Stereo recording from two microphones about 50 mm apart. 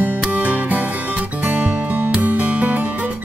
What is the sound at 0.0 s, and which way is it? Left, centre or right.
Music, right.